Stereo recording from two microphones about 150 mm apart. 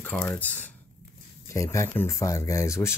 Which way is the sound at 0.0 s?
10° left (ahead or behind).